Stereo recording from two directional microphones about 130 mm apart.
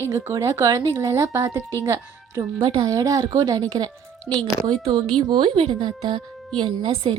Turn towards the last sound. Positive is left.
turn(degrees=-45)  # may be behind; listen again after turning